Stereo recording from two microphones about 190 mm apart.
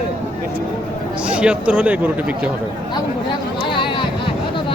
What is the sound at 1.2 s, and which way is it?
Speech, 5° right (ahead or behind).